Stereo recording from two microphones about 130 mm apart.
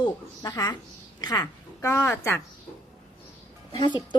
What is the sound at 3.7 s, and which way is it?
Speech, 35° left (ahead or behind).